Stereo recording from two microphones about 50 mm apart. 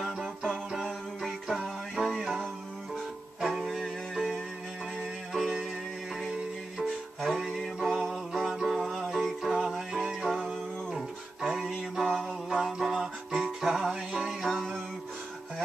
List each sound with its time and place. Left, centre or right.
1.5 s music: centre
7.2 s music: centre
10.4 s music: centre
12.2 s music: centre